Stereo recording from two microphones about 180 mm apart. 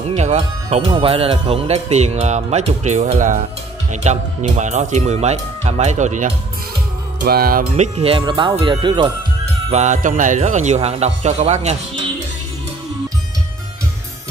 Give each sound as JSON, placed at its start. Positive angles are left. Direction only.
{"t": 0.1, "sound": "speech", "side_deg": -40}
{"t": 7.2, "sound": "music", "side_deg": -55}
{"t": 7.7, "sound": "speech", "side_deg": -35}
{"t": 8.2, "sound": "speech", "side_deg": -25}
{"t": 9.7, "sound": "speech", "side_deg": -40}